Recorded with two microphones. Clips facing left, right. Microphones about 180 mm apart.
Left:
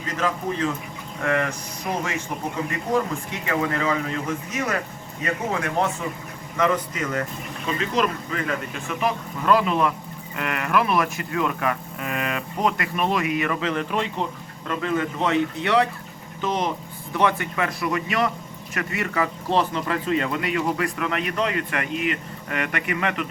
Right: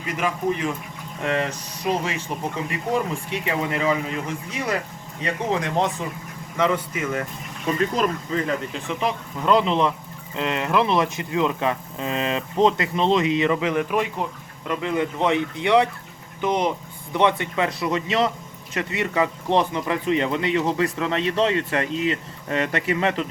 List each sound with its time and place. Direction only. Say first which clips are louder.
0.0 s speech: right 1 dB; 15° right (ahead or behind)
8.3 s speech: right 3 dB; 25° right (ahead or behind)